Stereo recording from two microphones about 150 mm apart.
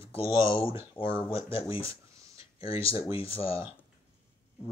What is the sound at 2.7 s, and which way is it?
Speech, 35° left (ahead or behind).